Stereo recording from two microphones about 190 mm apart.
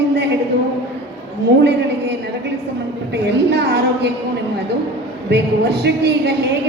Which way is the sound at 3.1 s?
60° right (ahead or behind).